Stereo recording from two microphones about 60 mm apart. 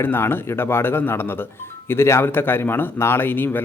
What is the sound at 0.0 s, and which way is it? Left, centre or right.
A man's voice, left.